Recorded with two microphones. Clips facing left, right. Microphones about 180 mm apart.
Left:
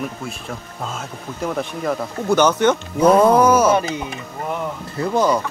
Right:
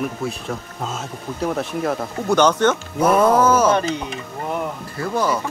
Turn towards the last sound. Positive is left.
turn(degrees=15)  # may be behind; listen again after turning